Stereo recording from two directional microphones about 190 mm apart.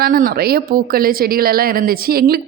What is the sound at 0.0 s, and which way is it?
A woman's voice, 50° right (ahead or behind).